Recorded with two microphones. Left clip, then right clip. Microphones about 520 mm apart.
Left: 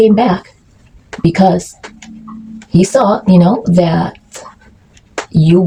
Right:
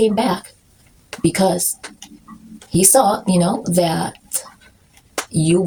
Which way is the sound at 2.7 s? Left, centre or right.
Right.